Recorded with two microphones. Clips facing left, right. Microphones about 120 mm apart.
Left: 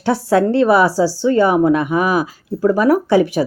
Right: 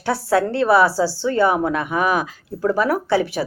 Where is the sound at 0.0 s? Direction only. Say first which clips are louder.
Left 4 dB; 20° left (ahead or behind).